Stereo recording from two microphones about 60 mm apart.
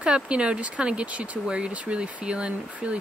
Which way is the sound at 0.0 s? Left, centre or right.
Centre.